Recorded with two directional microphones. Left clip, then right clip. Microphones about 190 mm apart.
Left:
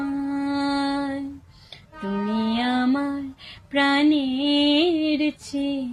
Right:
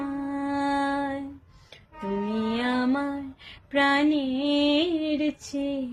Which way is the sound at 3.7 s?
20° right (ahead or behind).